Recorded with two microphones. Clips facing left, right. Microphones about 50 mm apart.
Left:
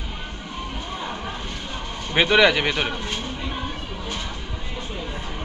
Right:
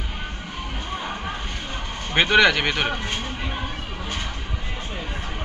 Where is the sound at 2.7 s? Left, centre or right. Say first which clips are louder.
Right 1 dB; right.